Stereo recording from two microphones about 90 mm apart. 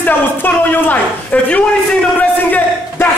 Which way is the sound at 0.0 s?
20° left (ahead or behind).